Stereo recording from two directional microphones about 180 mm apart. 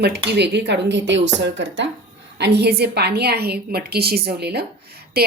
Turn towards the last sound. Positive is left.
turn(degrees=-60)  # may be behind; listen again after turning